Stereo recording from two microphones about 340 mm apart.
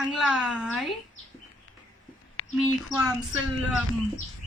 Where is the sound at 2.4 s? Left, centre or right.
Left.